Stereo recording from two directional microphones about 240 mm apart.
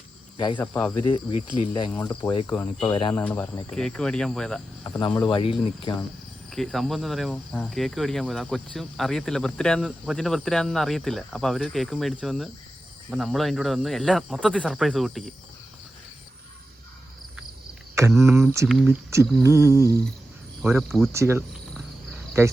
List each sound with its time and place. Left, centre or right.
0.3 s speech: centre
0.6 s speech: centre
1.3 s speech: left
2.5 s cricket: centre
2.8 s speech: centre
3.2 s cricket: centre
4.9 s speech: centre
6.5 s cricket: centre
18.1 s speech: centre
20.6 s cricket: centre
21.1 s speech: centre
22.1 s cricket: centre